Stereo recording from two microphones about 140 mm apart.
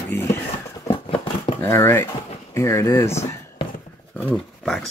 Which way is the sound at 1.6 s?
15° left (ahead or behind).